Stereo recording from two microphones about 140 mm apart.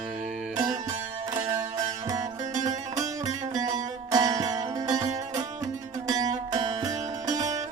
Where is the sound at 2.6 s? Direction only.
60° right (ahead or behind).